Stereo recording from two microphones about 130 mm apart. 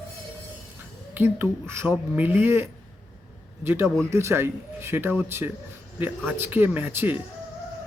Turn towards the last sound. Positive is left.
turn(degrees=-15)  # may be behind; listen again after turning